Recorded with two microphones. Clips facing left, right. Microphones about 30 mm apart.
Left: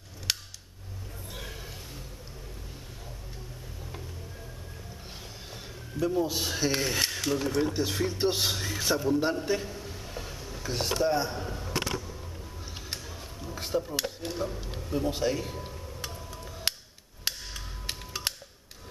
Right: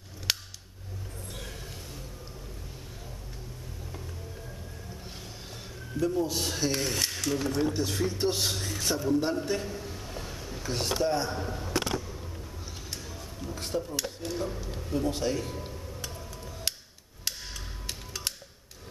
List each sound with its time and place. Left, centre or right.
0.3 s scissors: centre
1.3 s a sound: centre
5.9 s speech: centre
13.0 s dishes: centre
14.8 s a sound: centre
17.2 s music: centre